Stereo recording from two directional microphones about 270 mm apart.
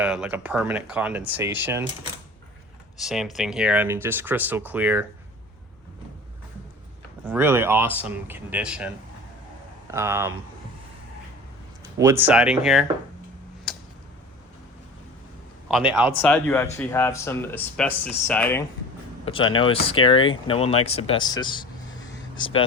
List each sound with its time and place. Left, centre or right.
0.0 s speech: centre
3.0 s speech: centre
7.3 s speech: centre
11.9 s speech: centre
13.7 s a sound: centre
15.7 s speech: centre
19.2 s speech: centre